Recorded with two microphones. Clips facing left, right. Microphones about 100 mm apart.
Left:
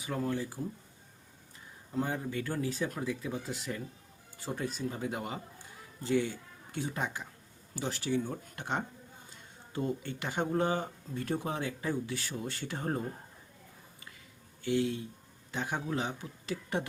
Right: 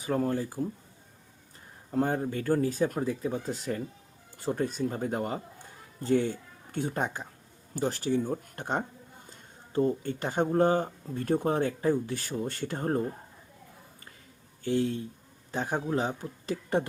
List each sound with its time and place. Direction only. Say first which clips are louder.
0.0 s speech: right 5 dB; 40° right (ahead or behind)
1.9 s speech: right 6 dB; 50° right (ahead or behind)
14.6 s speech: right 3 dB; 40° right (ahead or behind)